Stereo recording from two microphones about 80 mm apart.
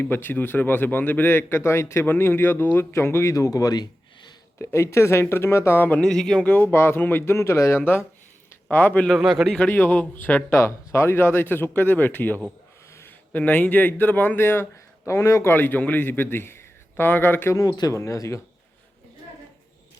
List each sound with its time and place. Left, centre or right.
0.0 s speech: left
3.3 s speech: left
4.5 s speech: left
5.9 s speech: centre
6.4 s speech: left
8.7 s speech: left
9.0 s a man's voice: centre
9.6 s speech: left
17.5 s speech: left